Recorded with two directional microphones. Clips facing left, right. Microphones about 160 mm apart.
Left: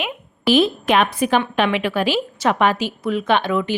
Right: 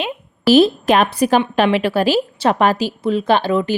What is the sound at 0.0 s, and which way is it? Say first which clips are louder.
A woman's voice: right 4 dB; 40° right (ahead or behind).